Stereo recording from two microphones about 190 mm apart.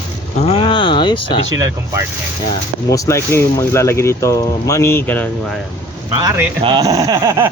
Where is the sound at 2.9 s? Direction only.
15° left (ahead or behind).